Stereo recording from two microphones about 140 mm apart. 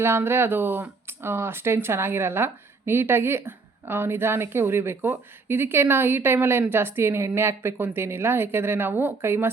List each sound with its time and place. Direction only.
0.0 s speech: 15° right (ahead or behind)